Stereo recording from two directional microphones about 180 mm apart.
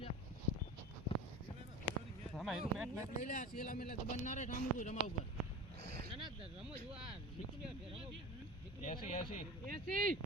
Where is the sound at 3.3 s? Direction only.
45° left (ahead or behind).